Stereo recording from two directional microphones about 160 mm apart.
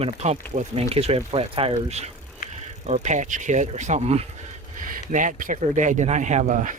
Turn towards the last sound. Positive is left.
turn(degrees=-55)  # may be behind; listen again after turning